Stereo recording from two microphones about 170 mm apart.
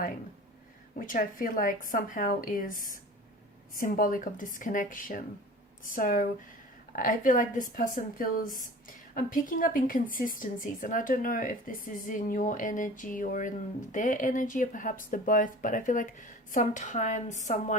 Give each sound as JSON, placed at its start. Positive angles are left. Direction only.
{"t": 0.9, "sound": "a woman's voice", "side_deg": 50}